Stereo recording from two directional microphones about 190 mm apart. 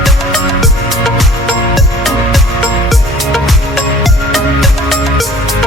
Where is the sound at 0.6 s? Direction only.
Centre (ahead or behind).